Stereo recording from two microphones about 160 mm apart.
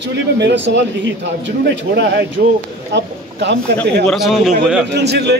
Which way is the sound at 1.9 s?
90° right.